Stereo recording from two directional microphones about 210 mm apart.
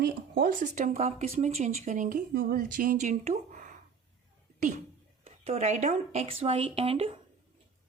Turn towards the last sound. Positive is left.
turn(degrees=-25)  # may be behind; listen again after turning